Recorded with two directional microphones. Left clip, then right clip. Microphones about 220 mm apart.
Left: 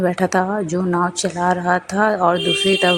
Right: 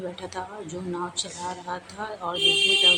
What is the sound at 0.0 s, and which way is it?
Speech, 35° left (ahead or behind).